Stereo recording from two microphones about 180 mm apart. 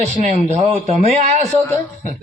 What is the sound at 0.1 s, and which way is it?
A man's voice, 40° right (ahead or behind).